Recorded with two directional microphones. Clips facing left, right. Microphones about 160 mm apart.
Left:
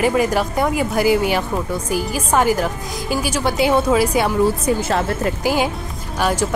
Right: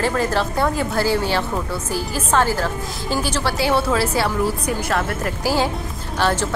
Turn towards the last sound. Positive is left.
turn(degrees=10)  # may be behind; listen again after turning